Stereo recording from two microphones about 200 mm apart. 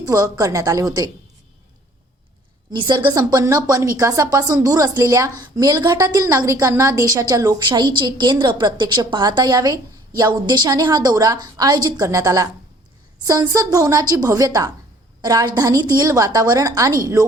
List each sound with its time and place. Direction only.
0.0 s a woman's voice: 15° right (ahead or behind)
2.7 s a woman's voice: 20° right (ahead or behind)